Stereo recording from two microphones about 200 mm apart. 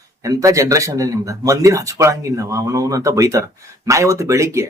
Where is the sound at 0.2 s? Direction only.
15° right (ahead or behind).